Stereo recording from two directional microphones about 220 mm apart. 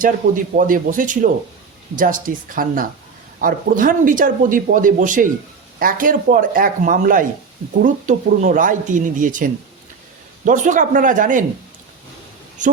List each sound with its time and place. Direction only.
0.0 s speech: 40° right (ahead or behind)